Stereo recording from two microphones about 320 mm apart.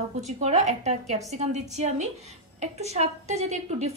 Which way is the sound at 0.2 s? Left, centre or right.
Right.